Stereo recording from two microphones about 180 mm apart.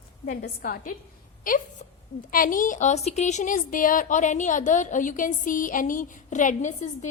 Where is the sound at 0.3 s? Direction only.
55° left (ahead or behind).